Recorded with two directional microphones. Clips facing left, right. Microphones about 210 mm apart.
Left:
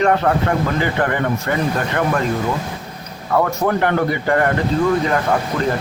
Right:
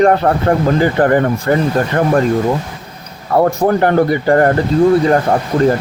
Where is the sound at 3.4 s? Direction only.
35° right (ahead or behind).